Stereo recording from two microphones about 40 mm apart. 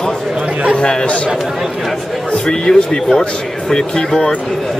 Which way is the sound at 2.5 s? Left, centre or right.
Left.